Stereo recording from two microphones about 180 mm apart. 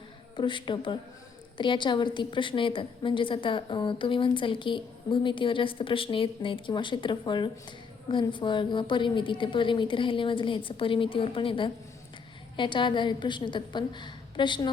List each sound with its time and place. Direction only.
0.3 s a woman's voice: 25° left (ahead or behind)